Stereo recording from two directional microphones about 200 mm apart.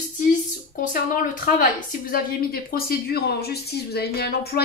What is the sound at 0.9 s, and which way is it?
Speech, 45° left (ahead or behind).